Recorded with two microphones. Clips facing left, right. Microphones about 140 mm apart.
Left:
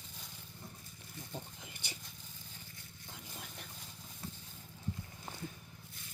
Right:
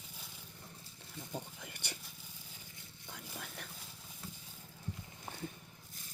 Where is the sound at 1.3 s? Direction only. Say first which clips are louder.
Right 3 dB; 60° right (ahead or behind).